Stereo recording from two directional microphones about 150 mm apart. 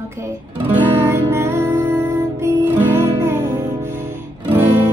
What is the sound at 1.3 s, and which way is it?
Music, 15° right (ahead or behind).